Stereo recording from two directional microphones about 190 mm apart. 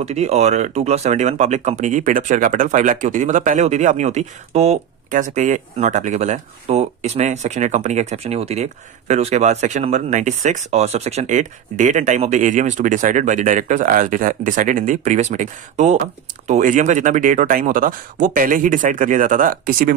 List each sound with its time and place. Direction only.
0.0 s speech: 35° right (ahead or behind)